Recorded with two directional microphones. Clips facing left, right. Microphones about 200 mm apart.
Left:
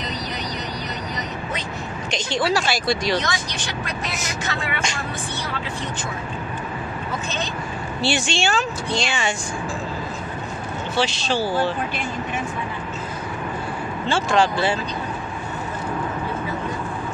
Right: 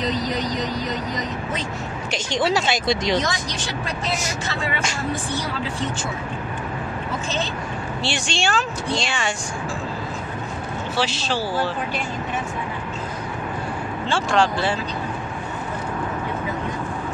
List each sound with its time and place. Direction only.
2.0 s a woman's voice: 10° right (ahead or behind)
2.4 s speech: 20° right (ahead or behind)
8.0 s speech: 5° left (ahead or behind)
11.0 s speech: 5° right (ahead or behind)
14.0 s speech: centre (ahead or behind)